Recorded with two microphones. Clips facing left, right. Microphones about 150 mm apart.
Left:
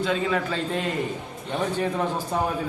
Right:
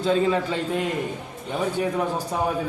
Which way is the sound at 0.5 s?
10° right (ahead or behind).